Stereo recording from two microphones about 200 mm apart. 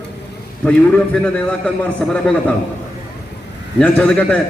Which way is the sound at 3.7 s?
5° left (ahead or behind).